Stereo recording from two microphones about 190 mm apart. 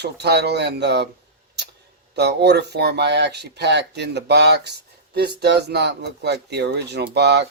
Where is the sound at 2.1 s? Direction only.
60° right (ahead or behind).